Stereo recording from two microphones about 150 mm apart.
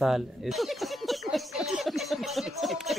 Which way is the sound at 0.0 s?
Centre (ahead or behind).